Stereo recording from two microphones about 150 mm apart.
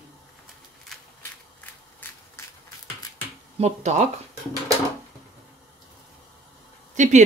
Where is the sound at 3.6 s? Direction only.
50° right (ahead or behind).